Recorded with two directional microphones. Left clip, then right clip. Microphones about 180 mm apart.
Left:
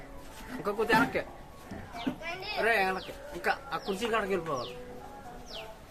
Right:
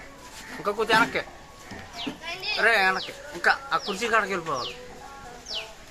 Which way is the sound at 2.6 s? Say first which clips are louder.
Right 7 dB; 25° right (ahead or behind).